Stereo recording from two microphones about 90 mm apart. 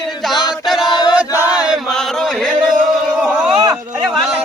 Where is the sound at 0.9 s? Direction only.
55° left (ahead or behind).